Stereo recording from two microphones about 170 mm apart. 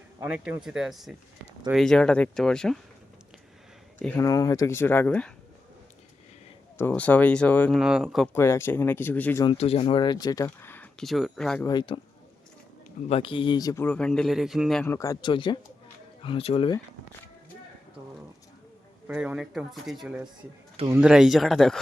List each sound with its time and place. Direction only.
0.2 s speech: 5° right (ahead or behind)
4.2 s speech: 20° left (ahead or behind)
6.7 s speech: 10° left (ahead or behind)
7.8 s speech: 5° right (ahead or behind)
8.3 s speech: 15° left (ahead or behind)
9.4 s speech: 35° left (ahead or behind); by 11.6 s centre (ahead or behind)
11.6 s speech: 25° left (ahead or behind)
13.1 s speech: 35° left (ahead or behind)
13.8 s speech: 5° left (ahead or behind)
14.8 s speech: 20° left (ahead or behind); by 16.7 s 35° left (ahead or behind)
19.0 s speech: 10° right (ahead or behind)